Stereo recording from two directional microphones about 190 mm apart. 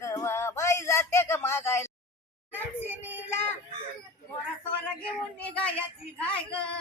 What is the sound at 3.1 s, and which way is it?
Child singing, 10° left (ahead or behind).